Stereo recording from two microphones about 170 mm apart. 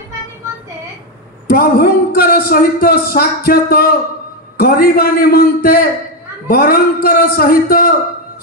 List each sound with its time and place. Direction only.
1.5 s a man's voice: 65° left (ahead or behind)